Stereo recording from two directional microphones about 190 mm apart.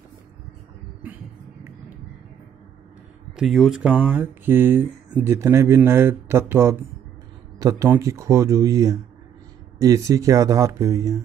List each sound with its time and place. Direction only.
1.0 s music: 10° right (ahead or behind)
3.3 s speech: centre (ahead or behind); by 11.1 s 20° right (ahead or behind)